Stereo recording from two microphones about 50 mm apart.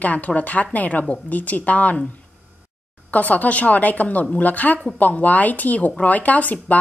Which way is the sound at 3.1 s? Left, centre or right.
Left.